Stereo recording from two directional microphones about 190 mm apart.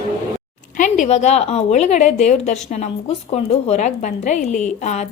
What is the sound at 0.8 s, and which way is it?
Speech, 40° left (ahead or behind).